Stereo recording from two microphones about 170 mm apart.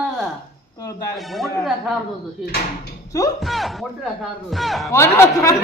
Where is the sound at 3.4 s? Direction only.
Centre (ahead or behind).